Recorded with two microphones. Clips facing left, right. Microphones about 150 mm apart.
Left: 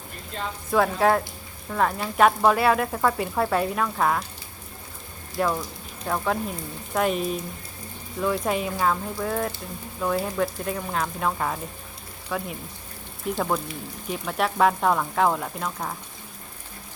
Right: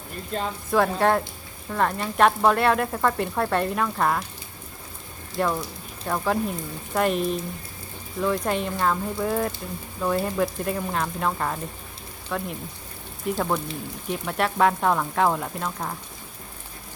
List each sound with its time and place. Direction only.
0.3 s speech: 45° right (ahead or behind)
0.7 s speech: centre (ahead or behind)
5.4 s speech: centre (ahead or behind)